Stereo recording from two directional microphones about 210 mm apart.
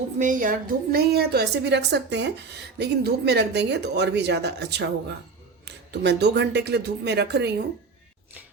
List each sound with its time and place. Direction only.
0.2 s a woman's voice: 40° right (ahead or behind)